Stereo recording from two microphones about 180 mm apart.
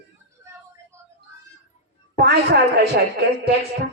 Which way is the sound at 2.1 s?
65° right (ahead or behind).